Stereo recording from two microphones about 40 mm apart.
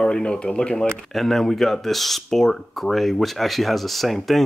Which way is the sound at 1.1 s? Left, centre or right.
Centre.